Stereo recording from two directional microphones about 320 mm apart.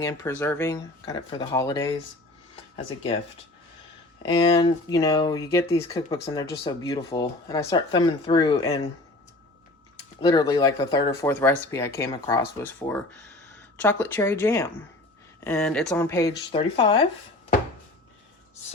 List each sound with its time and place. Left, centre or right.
0.0 s speech: centre
4.2 s speech: centre
10.2 s speech: centre